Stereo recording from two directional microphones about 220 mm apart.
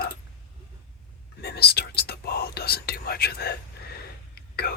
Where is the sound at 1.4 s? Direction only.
45° left (ahead or behind).